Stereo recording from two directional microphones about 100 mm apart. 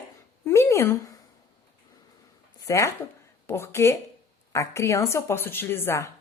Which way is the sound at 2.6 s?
30° left (ahead or behind).